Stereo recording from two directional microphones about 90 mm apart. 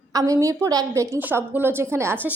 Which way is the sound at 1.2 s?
20° right (ahead or behind).